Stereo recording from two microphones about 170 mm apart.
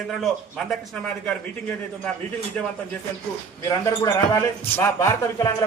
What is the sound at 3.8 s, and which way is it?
Speech, 15° left (ahead or behind).